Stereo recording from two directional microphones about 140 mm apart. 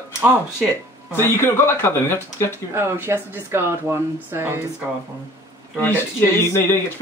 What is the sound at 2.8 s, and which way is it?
Speech, 20° right (ahead or behind).